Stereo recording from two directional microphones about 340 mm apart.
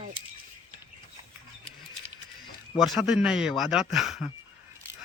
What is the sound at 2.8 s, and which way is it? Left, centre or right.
Speech, centre.